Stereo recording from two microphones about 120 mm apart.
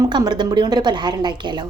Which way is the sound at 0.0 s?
35° right (ahead or behind).